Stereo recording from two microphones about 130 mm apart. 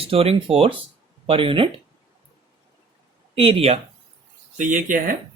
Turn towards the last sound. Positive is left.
turn(degrees=-90)